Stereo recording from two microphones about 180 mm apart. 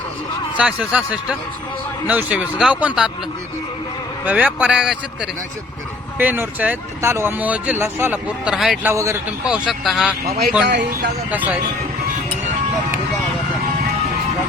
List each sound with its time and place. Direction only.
0.5 s speech: 5° right (ahead or behind)
4.3 s speech: 10° right (ahead or behind)
8.9 s speech: 15° right (ahead or behind)
9.5 s speech: 5° right (ahead or behind)
10.2 s speech: 60° right (ahead or behind)
11.3 s speech: 10° right (ahead or behind)